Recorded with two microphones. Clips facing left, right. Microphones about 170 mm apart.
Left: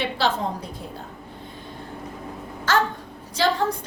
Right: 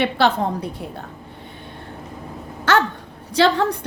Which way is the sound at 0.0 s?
60° right (ahead or behind).